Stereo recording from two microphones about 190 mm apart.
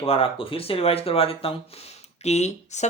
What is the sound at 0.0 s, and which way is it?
Speech, 30° left (ahead or behind).